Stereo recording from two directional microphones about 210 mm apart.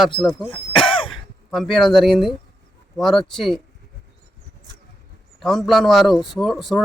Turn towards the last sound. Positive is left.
turn(degrees=0)  # may be behind; listen again after turning